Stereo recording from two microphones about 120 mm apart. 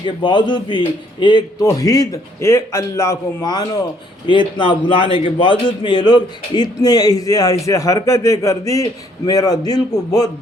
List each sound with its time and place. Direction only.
0.0 s a man's voice: 40° left (ahead or behind)